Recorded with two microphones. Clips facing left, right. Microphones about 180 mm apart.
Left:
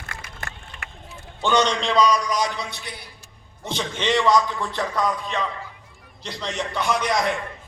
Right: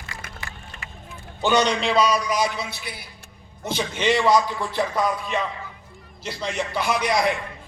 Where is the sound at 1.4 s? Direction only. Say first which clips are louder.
Right 1 dB; 10° right (ahead or behind).